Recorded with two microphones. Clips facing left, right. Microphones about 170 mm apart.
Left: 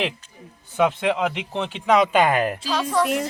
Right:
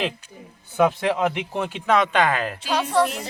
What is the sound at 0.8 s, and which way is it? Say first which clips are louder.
Speech: right 1 dB; 5° right (ahead or behind).